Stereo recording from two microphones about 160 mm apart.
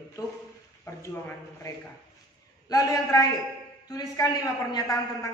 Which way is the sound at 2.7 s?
25° left (ahead or behind).